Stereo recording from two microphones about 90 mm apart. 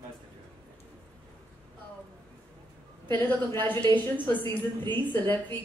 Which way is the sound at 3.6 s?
20° left (ahead or behind).